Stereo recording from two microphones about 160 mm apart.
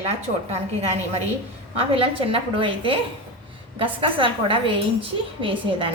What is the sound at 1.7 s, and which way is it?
A woman's voice, 35° right (ahead or behind).